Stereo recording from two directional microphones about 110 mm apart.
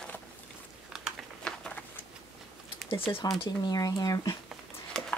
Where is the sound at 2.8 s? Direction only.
55° left (ahead or behind).